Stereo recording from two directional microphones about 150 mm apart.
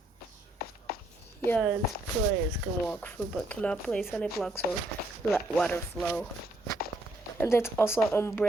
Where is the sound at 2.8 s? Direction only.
10° left (ahead or behind).